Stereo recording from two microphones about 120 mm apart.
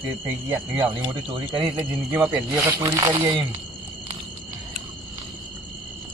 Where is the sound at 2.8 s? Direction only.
35° right (ahead or behind).